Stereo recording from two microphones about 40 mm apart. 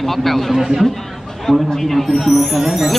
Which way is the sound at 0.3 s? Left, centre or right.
Centre.